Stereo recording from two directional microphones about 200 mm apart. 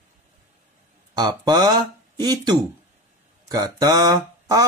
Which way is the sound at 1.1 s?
20° right (ahead or behind).